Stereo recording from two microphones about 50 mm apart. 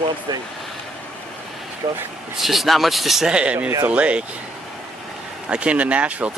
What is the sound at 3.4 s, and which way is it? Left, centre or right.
Speech, right.